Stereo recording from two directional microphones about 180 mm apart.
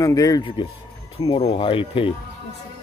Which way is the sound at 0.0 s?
20° left (ahead or behind).